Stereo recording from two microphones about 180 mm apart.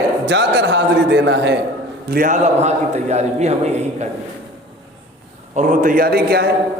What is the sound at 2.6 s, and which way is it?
Speech, 40° right (ahead or behind).